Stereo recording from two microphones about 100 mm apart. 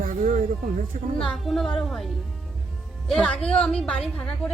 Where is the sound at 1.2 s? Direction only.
5° left (ahead or behind).